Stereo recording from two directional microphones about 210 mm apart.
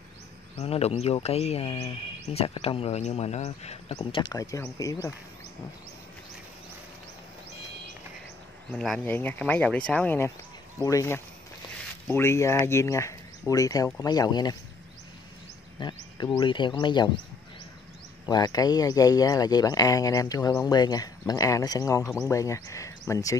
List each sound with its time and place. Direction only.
0.6 s speech: 30° left (ahead or behind)
8.7 s speech: centre (ahead or behind); by 14.6 s 20° left (ahead or behind)
15.8 s speech: 20° left (ahead or behind)
18.2 s speech: 20° left (ahead or behind)